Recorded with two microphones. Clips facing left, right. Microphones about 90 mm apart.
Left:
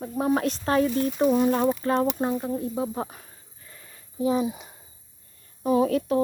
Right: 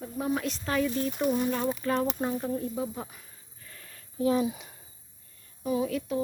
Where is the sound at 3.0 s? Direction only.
45° left (ahead or behind).